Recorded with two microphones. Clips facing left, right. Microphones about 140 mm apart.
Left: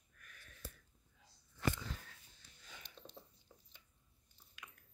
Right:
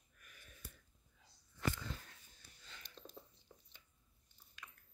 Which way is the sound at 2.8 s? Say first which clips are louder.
Even; 65° left (ahead or behind).